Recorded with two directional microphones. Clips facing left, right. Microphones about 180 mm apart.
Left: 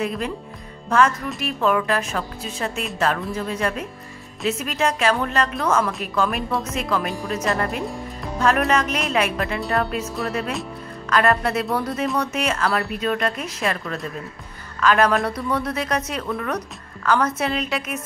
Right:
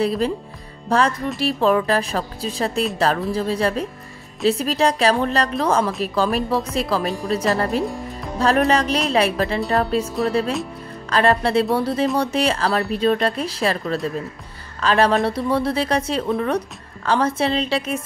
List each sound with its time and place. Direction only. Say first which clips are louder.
0.0 s a woman's voice: right 5 dB; 35° right (ahead or behind)